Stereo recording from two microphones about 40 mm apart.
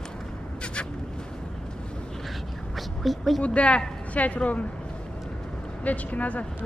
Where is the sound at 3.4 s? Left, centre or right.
Left.